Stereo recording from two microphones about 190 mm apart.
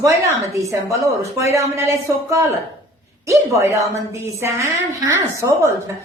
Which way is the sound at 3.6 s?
15° right (ahead or behind).